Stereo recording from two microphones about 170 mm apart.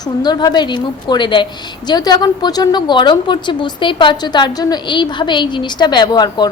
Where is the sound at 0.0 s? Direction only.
25° left (ahead or behind).